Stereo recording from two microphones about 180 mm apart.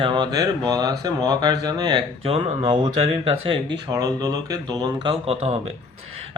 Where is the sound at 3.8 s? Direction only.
20° right (ahead or behind).